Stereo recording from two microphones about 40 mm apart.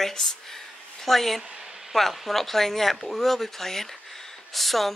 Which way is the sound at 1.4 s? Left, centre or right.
Centre.